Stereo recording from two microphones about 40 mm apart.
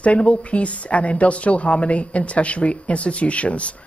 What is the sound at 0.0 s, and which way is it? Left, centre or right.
Speech, left.